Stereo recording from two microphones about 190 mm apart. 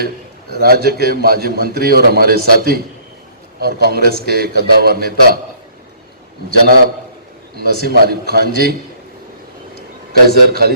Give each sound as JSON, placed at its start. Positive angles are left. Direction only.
{"t": 0.5, "sound": "a man's voice", "side_deg": -55}
{"t": 7.5, "sound": "a man's voice", "side_deg": -55}
{"t": 9.7, "sound": "a sound", "side_deg": -55}